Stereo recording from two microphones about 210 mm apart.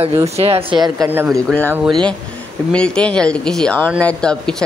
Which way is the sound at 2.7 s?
5° left (ahead or behind).